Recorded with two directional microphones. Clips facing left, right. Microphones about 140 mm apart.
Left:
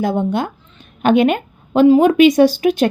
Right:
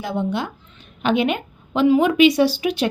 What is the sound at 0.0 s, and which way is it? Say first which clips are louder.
A woman's voice: left 6 dB; 45° left (ahead or behind).